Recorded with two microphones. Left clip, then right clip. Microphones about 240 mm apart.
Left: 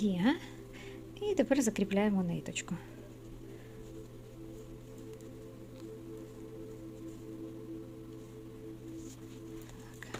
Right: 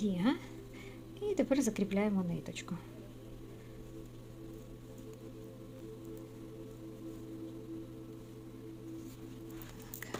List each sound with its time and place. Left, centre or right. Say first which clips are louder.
0.0 s speech: left 2 dB; left